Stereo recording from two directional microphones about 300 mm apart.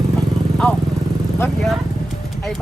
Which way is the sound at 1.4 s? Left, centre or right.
Centre.